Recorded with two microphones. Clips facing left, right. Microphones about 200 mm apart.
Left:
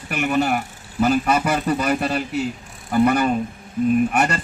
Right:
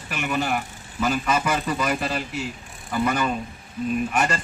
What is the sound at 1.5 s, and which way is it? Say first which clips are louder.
A man's voice: left 4 dB; 55° left (ahead or behind).